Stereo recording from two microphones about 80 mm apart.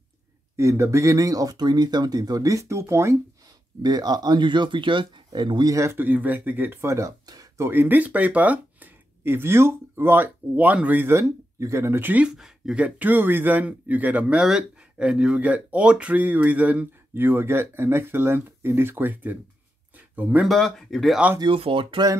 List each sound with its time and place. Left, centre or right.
0.6 s speech: right
3.8 s speech: right
5.7 s a man's voice: right
5.9 s speech: right
12.3 s speech: centre
12.8 s speech: right
20.4 s speech: centre
21.4 s speech: right